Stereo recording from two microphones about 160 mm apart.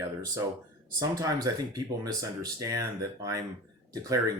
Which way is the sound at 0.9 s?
20° right (ahead or behind).